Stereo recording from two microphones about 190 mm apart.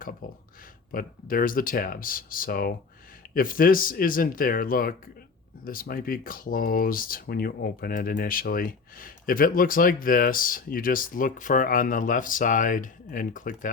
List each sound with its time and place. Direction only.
0.0 s speech: 50° left (ahead or behind)